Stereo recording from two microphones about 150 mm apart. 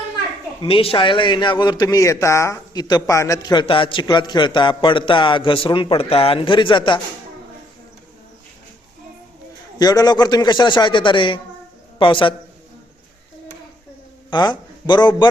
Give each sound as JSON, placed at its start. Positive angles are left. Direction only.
{"t": 0.6, "sound": "a man's voice", "side_deg": 35}
{"t": 9.7, "sound": "a man's voice", "side_deg": 25}
{"t": 14.3, "sound": "a man's voice", "side_deg": 30}